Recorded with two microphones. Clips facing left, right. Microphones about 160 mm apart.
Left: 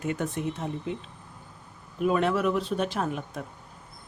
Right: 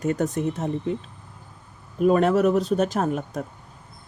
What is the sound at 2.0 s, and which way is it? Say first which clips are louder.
Speech: right 6 dB; 45° right (ahead or behind).